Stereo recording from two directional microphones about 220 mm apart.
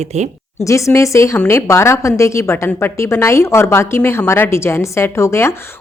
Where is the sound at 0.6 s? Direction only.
15° left (ahead or behind).